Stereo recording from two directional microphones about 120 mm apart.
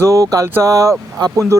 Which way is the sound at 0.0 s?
25° right (ahead or behind).